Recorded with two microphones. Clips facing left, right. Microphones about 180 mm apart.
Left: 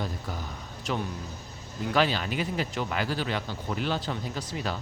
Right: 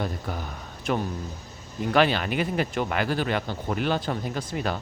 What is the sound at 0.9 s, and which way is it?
Speech, 55° right (ahead or behind).